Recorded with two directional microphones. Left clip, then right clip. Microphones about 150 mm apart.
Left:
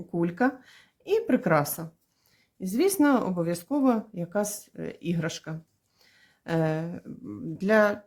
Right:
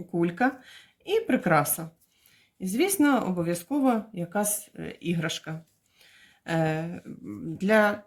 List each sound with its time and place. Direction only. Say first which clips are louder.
0.1 s speech: right 1 dB; 40° left (ahead or behind)
6.0 s a sound: right 3 dB; 50° left (ahead or behind)
7.3 s speech: even; 35° left (ahead or behind)